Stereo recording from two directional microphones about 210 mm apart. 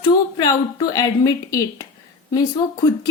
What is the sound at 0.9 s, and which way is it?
Speech, 15° left (ahead or behind).